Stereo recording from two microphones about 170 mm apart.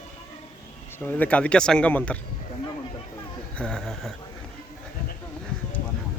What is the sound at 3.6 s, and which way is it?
Speech, 5° left (ahead or behind).